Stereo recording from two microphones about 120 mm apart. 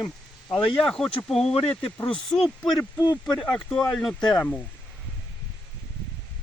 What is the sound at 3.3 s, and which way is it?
Speech, 5° left (ahead or behind).